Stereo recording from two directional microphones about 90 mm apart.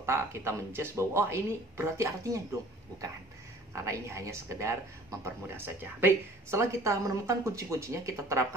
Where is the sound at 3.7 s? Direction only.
35° right (ahead or behind).